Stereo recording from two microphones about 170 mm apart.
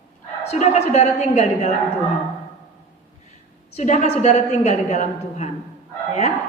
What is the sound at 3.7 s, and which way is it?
A woman's voice, 45° left (ahead or behind).